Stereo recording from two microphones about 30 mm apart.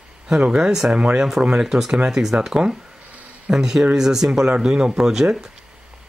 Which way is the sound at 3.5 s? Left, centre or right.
Centre.